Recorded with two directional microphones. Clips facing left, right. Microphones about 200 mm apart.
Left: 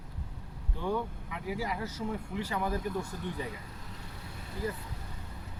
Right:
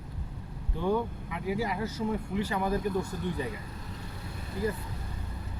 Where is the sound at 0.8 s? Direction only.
25° right (ahead or behind).